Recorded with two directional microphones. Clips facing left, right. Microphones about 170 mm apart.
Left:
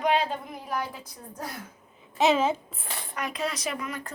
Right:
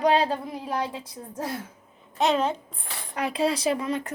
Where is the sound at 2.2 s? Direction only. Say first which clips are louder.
Left 1 dB; centre (ahead or behind).